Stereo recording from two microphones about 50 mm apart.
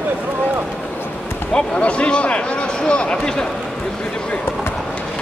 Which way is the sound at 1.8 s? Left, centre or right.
Left.